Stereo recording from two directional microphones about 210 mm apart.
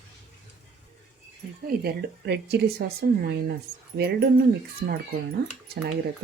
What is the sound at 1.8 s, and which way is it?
Speech, 50° right (ahead or behind).